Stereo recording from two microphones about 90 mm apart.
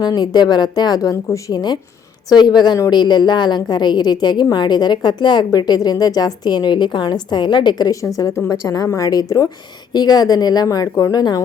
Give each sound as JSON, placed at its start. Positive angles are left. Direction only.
{"t": 0.0, "sound": "a woman's voice", "side_deg": 50}
{"t": 1.5, "sound": "a woman's voice", "side_deg": 55}
{"t": 8.0, "sound": "a woman's voice", "side_deg": 35}